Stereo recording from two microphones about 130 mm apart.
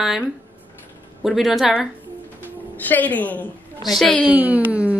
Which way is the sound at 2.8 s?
15° left (ahead or behind).